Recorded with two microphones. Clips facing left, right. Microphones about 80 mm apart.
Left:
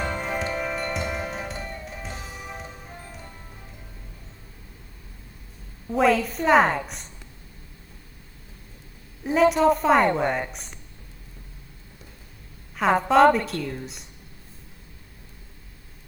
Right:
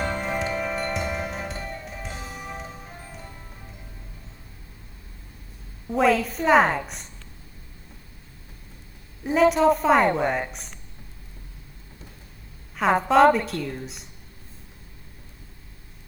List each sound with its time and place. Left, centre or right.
0.0 s music: centre
5.9 s a woman's voice: centre
9.2 s a woman's voice: centre
12.7 s a woman's voice: centre